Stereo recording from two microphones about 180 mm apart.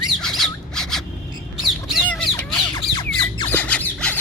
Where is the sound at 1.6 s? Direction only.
5° left (ahead or behind).